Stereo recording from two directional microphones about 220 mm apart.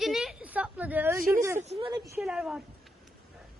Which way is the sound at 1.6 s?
25° right (ahead or behind).